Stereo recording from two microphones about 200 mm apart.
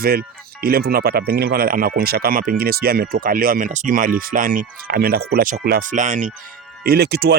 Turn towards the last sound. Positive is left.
turn(degrees=-55)  # may be behind; listen again after turning